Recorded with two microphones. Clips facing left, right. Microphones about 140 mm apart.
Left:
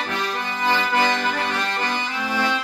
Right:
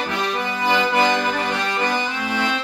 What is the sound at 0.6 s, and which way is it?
Music, 15° right (ahead or behind).